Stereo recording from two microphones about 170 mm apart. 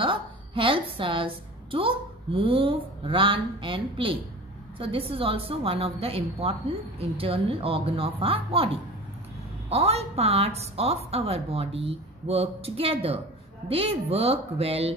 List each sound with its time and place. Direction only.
0.0 s a woman's voice: 30° right (ahead or behind)
9.7 s a woman's voice: 35° right (ahead or behind)